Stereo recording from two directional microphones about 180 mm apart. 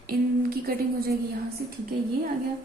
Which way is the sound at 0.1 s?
55° right (ahead or behind).